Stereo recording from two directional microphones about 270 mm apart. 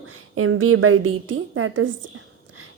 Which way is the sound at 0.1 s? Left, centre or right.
Right.